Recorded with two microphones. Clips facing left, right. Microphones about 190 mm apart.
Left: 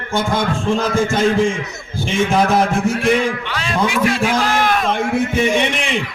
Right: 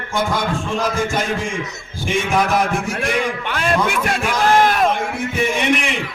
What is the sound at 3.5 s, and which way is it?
Speech, 55° right (ahead or behind).